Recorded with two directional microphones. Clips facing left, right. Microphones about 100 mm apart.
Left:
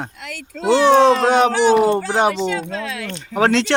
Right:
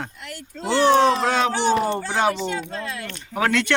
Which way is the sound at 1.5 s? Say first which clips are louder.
Left 6 dB; 90° left.